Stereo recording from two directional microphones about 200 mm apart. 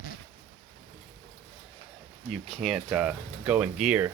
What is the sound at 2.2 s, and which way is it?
Speech, centre (ahead or behind).